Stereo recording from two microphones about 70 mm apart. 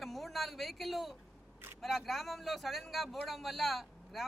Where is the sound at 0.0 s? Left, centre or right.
Centre.